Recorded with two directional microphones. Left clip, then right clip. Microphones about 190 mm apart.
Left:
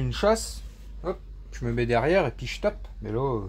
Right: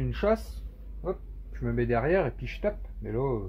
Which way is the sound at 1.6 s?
40° left (ahead or behind).